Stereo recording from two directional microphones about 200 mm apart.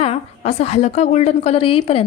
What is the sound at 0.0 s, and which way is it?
A woman's voice, 35° left (ahead or behind).